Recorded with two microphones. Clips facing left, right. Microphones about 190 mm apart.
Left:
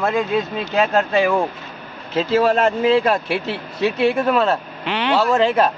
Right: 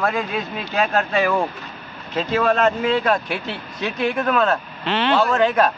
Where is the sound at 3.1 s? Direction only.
5° left (ahead or behind).